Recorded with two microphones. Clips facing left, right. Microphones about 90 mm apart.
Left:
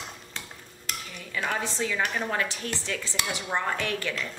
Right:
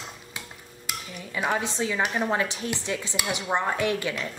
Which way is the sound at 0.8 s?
15° right (ahead or behind).